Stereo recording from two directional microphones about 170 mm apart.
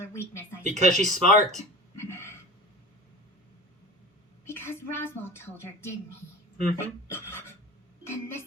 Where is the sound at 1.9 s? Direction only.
15° left (ahead or behind).